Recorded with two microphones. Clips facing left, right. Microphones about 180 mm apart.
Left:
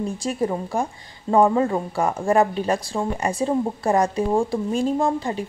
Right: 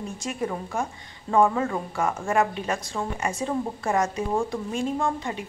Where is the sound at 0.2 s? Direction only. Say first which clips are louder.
Left 3 dB; 35° left (ahead or behind).